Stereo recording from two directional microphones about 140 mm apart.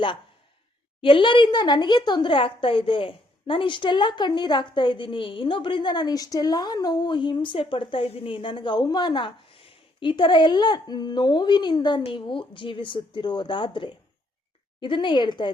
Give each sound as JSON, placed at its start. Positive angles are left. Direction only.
{"t": 1.0, "sound": "speech", "side_deg": 35}